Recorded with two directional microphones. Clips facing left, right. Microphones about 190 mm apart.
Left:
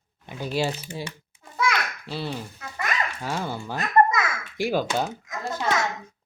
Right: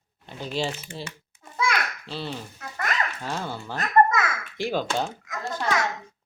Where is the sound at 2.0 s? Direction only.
10° left (ahead or behind).